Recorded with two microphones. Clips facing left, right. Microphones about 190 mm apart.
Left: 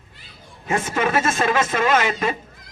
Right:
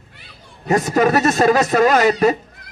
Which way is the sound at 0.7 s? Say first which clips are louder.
Right 6 dB; 40° right (ahead or behind).